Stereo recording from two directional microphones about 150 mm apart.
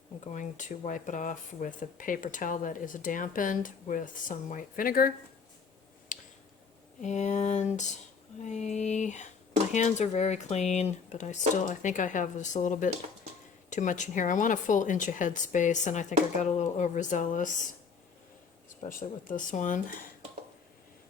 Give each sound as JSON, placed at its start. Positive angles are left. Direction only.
{"t": 0.3, "sound": "speech", "side_deg": 60}
{"t": 6.1, "sound": "a sound", "side_deg": 65}
{"t": 7.0, "sound": "speech", "side_deg": 50}
{"t": 18.9, "sound": "speech", "side_deg": 65}